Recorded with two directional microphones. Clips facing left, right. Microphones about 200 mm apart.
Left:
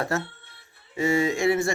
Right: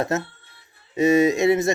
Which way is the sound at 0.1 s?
20° right (ahead or behind).